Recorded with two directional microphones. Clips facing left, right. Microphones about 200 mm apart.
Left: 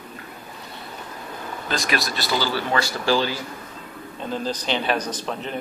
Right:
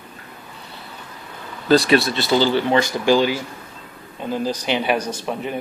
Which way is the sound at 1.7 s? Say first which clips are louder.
Right 11 dB; 30° right (ahead or behind).